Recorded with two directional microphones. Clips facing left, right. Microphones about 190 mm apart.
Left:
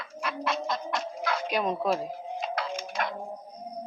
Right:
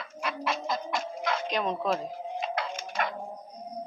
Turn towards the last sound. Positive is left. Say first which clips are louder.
# even
turn(degrees=0)  # may be behind; listen again after turning